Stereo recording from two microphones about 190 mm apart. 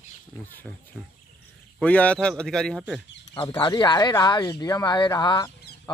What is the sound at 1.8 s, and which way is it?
A man's voice, 5° left (ahead or behind).